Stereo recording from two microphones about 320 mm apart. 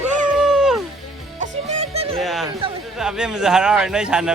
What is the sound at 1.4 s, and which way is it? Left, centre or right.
Music, centre.